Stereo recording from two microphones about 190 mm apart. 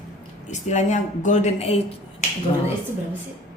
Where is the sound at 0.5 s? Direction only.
40° left (ahead or behind).